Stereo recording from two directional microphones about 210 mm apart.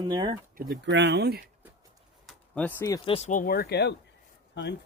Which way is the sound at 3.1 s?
35° left (ahead or behind).